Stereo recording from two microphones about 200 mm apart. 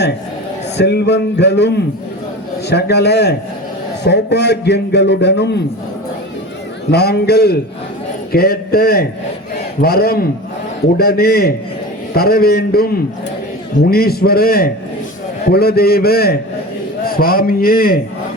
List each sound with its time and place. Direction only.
0.8 s a man's voice: 55° left (ahead or behind)
6.9 s a man's voice: 55° left (ahead or behind)